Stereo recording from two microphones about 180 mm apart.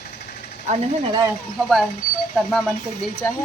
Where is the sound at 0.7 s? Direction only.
40° right (ahead or behind).